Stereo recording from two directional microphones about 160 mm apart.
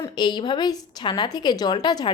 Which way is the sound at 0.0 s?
25° left (ahead or behind).